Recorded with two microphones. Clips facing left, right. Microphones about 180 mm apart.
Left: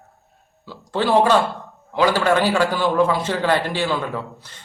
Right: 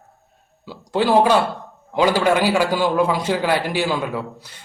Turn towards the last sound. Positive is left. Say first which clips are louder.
# right 2 dB
turn(degrees=-10)  # may be behind; listen again after turning